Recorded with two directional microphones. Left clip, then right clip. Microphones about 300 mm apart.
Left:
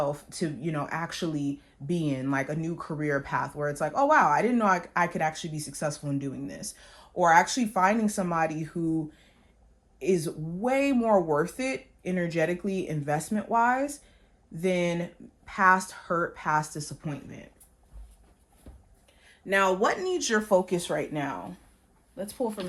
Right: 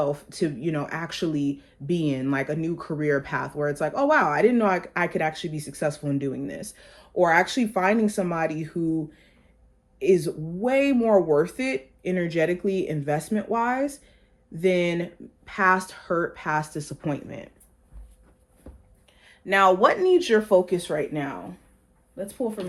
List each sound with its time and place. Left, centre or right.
0.0 s speech: centre
10.0 s speech: centre
19.8 s speech: centre
20.7 s speech: left